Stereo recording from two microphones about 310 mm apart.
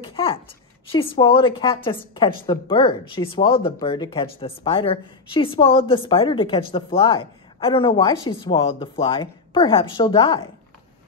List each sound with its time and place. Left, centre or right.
0.0 s a woman's voice: centre